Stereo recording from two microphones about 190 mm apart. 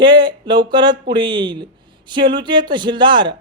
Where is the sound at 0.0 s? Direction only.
25° right (ahead or behind).